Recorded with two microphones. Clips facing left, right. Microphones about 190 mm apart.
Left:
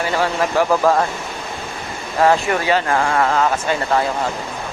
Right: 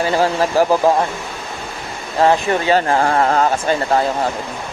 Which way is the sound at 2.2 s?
25° right (ahead or behind).